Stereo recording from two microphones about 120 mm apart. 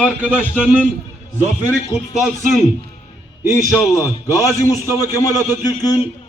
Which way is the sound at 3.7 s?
25° left (ahead or behind).